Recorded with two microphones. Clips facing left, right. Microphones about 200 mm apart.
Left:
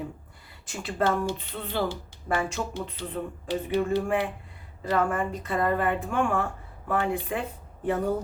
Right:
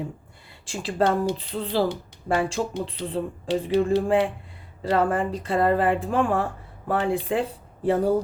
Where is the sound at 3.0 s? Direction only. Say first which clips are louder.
Right 5 dB; 30° right (ahead or behind).